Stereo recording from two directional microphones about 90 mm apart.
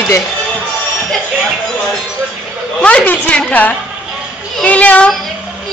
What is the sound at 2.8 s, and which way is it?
Speech, 15° left (ahead or behind).